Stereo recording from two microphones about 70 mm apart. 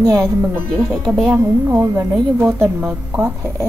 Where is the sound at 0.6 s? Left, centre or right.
Right.